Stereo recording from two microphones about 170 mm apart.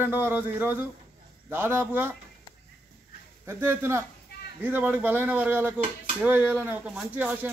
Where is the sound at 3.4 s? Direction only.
15° right (ahead or behind).